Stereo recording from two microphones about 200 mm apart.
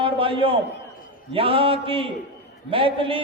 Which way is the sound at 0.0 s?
25° right (ahead or behind).